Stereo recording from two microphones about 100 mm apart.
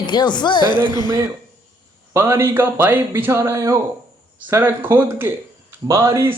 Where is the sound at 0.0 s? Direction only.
50° left (ahead or behind).